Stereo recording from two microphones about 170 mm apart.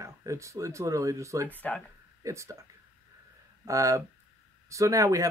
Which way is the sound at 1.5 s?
10° left (ahead or behind).